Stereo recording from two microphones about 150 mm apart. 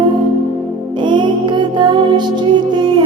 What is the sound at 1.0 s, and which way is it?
Music, 30° right (ahead or behind).